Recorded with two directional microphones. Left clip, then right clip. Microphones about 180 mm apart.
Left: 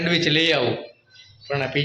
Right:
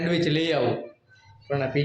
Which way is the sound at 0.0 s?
Centre (ahead or behind).